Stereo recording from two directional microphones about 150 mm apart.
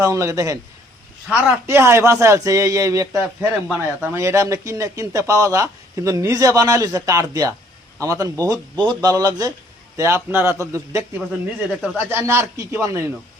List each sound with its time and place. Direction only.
0.0 s a man's voice: 20° right (ahead or behind)